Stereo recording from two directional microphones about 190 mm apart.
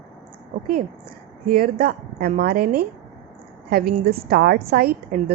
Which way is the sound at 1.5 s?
50° right (ahead or behind).